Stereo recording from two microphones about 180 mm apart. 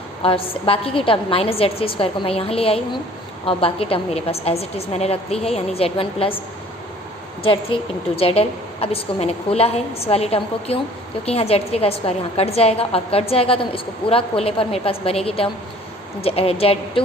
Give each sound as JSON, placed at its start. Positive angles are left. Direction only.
{"t": 0.2, "sound": "a woman's voice", "side_deg": 30}
{"t": 7.4, "sound": "a woman's voice", "side_deg": 30}